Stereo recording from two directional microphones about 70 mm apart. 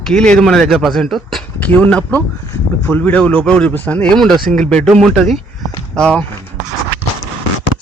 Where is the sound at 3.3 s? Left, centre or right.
Centre.